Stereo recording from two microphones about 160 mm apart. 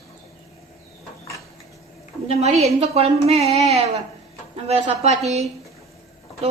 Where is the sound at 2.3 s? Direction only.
45° right (ahead or behind).